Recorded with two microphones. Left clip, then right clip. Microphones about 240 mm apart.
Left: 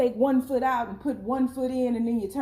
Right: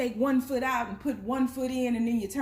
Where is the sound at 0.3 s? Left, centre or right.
Right.